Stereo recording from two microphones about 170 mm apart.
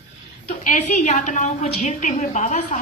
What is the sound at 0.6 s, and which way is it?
A woman's voice, 45° left (ahead or behind).